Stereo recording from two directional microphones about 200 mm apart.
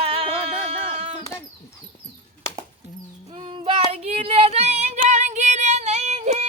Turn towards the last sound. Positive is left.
turn(degrees=-35)  # may be behind; listen again after turning